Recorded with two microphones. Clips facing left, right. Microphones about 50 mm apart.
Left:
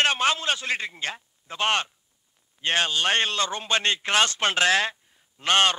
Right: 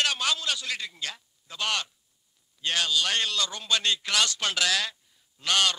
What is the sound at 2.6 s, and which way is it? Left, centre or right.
A man's voice, left.